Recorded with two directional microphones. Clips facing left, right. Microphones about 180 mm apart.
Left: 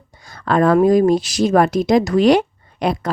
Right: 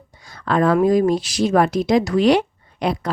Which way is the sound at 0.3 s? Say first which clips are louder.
Left 3 dB; 45° left (ahead or behind).